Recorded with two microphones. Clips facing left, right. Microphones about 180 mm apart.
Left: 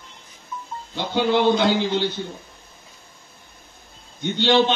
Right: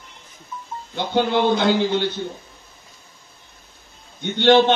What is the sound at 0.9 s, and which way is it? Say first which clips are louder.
A man's voice: even; 55° right (ahead or behind).